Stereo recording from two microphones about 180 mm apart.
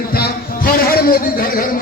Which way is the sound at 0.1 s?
55° left (ahead or behind).